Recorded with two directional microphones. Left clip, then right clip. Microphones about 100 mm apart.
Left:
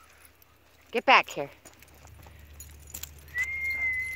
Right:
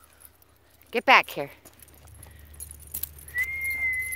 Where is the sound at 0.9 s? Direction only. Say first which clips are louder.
Right 2 dB; 40° right (ahead or behind).